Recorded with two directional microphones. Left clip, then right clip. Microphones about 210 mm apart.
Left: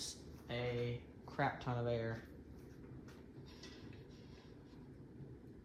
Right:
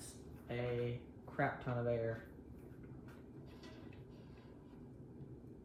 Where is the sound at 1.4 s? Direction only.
10° left (ahead or behind).